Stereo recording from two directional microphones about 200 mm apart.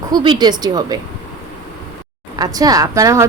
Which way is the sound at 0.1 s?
20° right (ahead or behind).